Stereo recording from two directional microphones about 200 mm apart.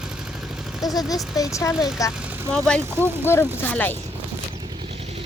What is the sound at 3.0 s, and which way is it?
Speech, 10° right (ahead or behind).